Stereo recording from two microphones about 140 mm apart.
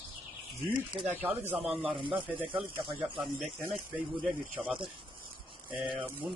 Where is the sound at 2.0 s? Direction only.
35° right (ahead or behind).